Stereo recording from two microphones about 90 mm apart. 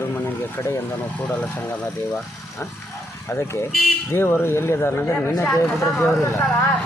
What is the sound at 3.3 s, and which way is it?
Speech, 30° left (ahead or behind).